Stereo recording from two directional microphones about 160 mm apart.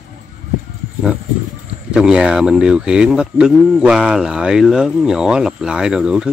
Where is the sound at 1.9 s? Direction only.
5° right (ahead or behind).